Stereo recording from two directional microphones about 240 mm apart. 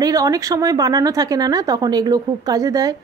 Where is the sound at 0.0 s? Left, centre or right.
Centre.